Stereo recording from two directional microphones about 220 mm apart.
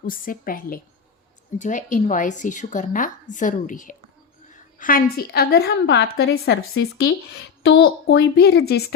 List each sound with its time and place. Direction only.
0.0 s a woman's voice: 40° left (ahead or behind)